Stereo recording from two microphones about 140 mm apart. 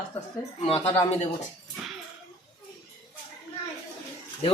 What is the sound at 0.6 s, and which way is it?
Speech, 45° left (ahead or behind).